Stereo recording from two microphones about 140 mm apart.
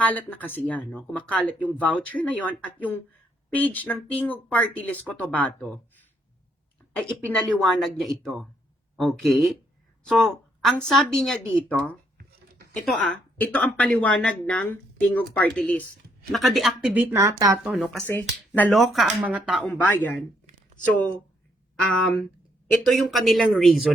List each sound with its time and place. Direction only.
0.0 s speech: 10° left (ahead or behind)
6.9 s speech: 5° left (ahead or behind)
16.3 s speech: centre (ahead or behind)
16.9 s speech: 15° right (ahead or behind)
17.6 s speech: 10° right (ahead or behind)
18.0 s speech: 15° left (ahead or behind)
18.7 s speech: centre (ahead or behind)
19.7 s speech: 10° left (ahead or behind)
21.8 s speech: 5° left (ahead or behind)